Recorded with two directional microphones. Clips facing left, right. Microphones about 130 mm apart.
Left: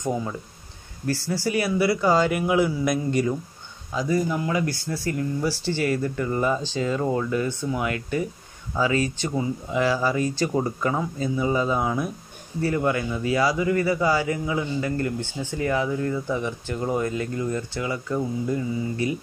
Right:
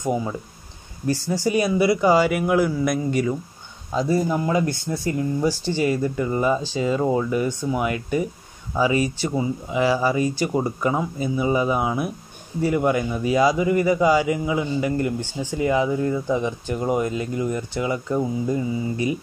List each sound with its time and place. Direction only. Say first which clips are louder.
0.0 s a man's voice: right 3 dB; 10° right (ahead or behind)
3.9 s a man's voice: right 3 dB; 30° right (ahead or behind)